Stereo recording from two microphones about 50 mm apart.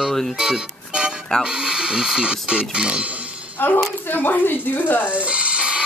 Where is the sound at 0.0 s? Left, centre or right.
Centre.